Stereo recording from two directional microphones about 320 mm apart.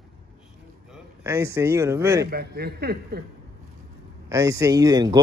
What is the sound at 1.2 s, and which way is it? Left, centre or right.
Speech, centre.